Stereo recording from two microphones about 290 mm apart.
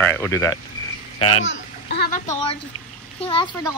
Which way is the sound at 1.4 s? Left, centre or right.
Left.